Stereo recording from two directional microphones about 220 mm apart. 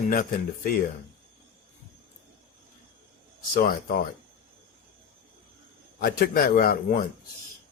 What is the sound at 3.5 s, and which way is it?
Speech, 40° left (ahead or behind).